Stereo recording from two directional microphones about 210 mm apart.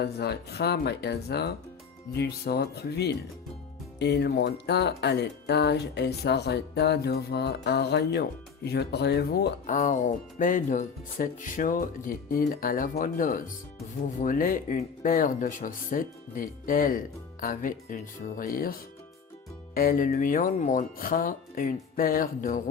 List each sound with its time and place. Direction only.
0.0 s speech: 50° left (ahead or behind)